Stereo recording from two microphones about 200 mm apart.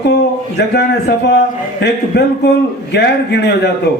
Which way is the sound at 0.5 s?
55° left (ahead or behind).